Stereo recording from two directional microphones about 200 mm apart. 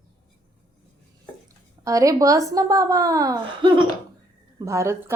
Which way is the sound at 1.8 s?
15° right (ahead or behind).